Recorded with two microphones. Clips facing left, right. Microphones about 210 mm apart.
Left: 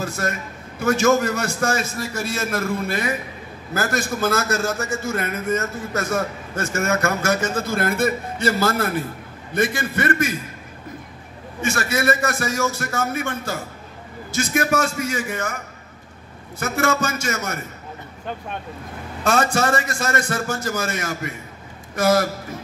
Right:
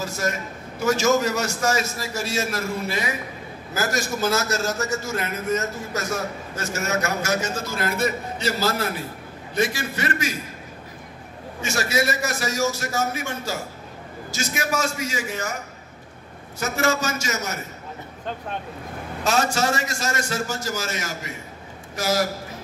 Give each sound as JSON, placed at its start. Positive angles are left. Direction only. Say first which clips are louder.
{"t": 0.0, "sound": "a man's voice", "louder": "left 1 dB", "side_deg": 55}
{"t": 11.6, "sound": "a man's voice", "louder": "left 2 dB", "side_deg": 55}
{"t": 16.5, "sound": "a man's voice", "louder": "left 2 dB", "side_deg": 55}
{"t": 19.2, "sound": "a man's voice", "louder": "left 3 dB", "side_deg": 55}